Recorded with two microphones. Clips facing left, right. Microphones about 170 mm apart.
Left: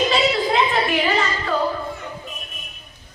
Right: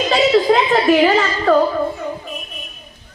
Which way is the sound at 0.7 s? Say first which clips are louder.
Right 8 dB; 45° right (ahead or behind).